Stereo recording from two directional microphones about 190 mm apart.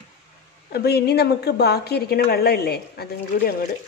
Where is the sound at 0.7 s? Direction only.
55° left (ahead or behind).